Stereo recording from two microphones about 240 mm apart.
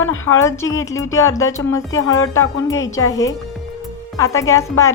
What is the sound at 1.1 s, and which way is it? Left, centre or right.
Speech, centre.